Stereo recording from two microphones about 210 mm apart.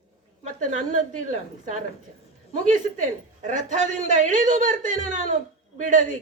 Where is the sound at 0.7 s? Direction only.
35° right (ahead or behind).